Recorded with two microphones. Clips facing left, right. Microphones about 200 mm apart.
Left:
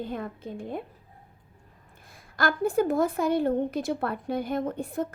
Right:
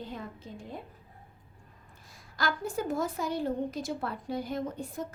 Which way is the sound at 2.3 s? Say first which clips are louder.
Left 8 dB; 55° left (ahead or behind).